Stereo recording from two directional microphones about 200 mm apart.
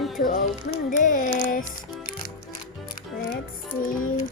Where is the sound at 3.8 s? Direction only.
45° left (ahead or behind).